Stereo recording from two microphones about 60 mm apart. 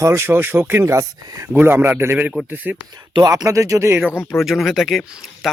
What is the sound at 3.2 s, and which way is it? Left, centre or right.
Speech, right.